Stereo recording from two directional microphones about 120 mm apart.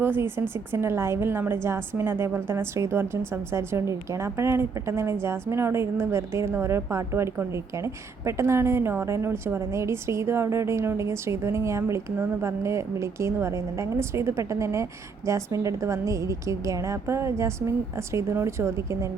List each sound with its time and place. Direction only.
0.0 s a woman's voice: 20° right (ahead or behind)